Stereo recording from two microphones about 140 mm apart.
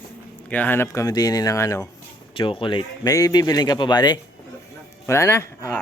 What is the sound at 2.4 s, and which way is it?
A man's voice, 40° left (ahead or behind).